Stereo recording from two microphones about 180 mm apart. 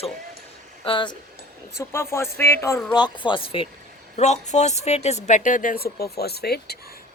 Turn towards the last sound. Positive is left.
turn(degrees=60)  # may be behind; listen again after turning